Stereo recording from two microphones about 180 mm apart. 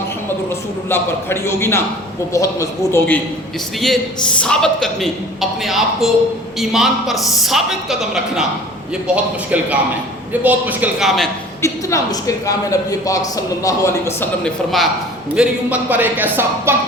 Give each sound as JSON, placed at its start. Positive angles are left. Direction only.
{"t": 0.9, "sound": "a man's voice", "side_deg": 15}
{"t": 4.4, "sound": "a woman's voice", "side_deg": 5}
{"t": 11.6, "sound": "a man's voice", "side_deg": 15}
{"t": 14.4, "sound": "a woman's voice", "side_deg": 0}